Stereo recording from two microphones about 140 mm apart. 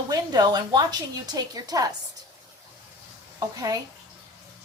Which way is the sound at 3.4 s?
25° right (ahead or behind).